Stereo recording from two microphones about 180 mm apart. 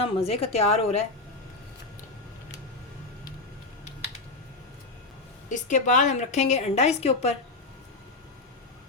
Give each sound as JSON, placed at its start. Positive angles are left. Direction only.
{"t": 0.0, "sound": "a woman's voice", "side_deg": 35}
{"t": 5.5, "sound": "a woman's voice", "side_deg": 45}